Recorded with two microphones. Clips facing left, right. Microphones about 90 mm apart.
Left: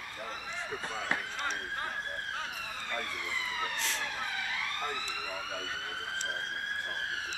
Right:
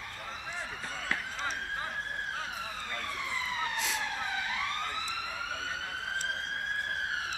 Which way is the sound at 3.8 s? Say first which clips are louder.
Right 2 dB; 5° right (ahead or behind).